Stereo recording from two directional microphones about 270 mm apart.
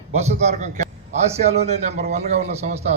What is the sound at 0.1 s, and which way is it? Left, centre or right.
A man's voice, right.